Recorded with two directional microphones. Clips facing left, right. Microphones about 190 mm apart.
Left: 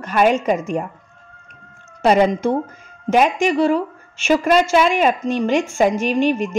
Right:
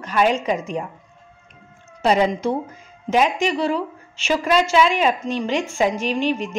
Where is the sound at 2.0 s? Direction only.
55° left (ahead or behind).